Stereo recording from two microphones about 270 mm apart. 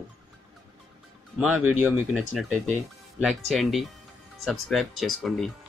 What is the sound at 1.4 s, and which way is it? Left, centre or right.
Speech, centre.